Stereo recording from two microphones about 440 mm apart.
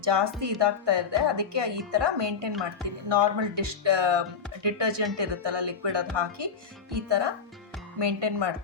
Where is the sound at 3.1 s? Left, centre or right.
Right.